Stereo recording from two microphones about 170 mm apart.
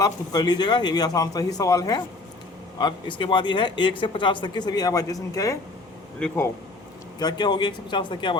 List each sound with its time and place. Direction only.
0.0 s speech: 25° left (ahead or behind)
6.1 s speech: 10° left (ahead or behind)
7.2 s speech: 25° left (ahead or behind)